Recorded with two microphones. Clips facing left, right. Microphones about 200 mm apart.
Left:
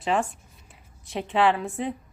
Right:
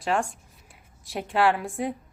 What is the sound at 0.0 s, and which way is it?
A woman's voice, centre (ahead or behind).